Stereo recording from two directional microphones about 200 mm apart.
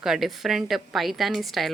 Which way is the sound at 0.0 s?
Centre (ahead or behind).